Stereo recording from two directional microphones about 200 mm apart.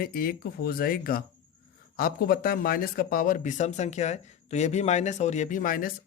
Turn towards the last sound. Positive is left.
turn(degrees=45)  # may be behind; listen again after turning